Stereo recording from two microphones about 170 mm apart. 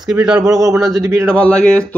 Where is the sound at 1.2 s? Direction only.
5° left (ahead or behind).